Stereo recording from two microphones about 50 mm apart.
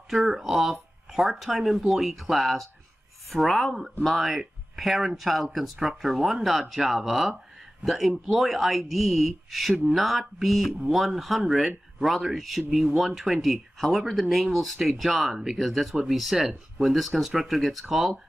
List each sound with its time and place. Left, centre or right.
0.1 s speech: centre